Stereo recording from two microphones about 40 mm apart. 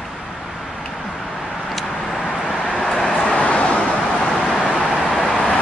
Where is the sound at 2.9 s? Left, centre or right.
Centre.